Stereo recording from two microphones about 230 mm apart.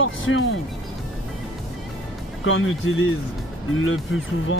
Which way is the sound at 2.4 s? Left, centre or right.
Left.